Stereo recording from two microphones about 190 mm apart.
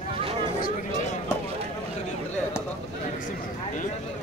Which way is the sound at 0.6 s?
40° left (ahead or behind).